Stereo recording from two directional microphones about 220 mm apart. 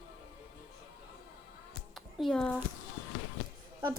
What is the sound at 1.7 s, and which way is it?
Music, centre (ahead or behind).